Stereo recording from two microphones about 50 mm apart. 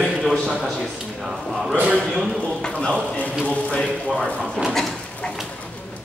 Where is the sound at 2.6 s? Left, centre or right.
Left.